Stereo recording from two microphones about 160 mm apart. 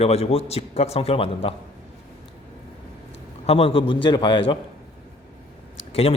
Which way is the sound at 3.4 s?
35° left (ahead or behind).